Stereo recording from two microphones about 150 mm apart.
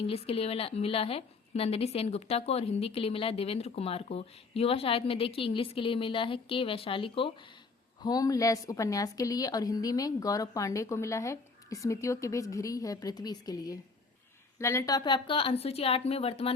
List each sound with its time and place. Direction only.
0.1 s a woman's voice: 40° left (ahead or behind)
8.0 s a woman's voice: 25° left (ahead or behind); by 16.5 s 40° left (ahead or behind)